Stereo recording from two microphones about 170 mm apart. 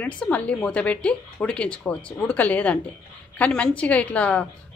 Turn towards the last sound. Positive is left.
turn(degrees=5)  # may be behind; listen again after turning